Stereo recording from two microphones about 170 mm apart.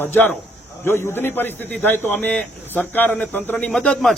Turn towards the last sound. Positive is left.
turn(degrees=5)  # may be behind; listen again after turning